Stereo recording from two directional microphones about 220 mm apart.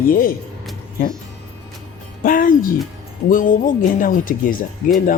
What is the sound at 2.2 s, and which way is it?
Speech, 40° left (ahead or behind).